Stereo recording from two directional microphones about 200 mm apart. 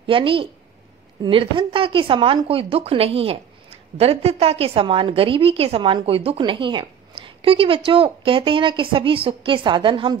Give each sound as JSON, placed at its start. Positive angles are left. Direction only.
{"t": 0.0, "sound": "a woman's voice", "side_deg": -25}